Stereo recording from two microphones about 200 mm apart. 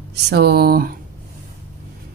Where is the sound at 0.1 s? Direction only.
55° right (ahead or behind).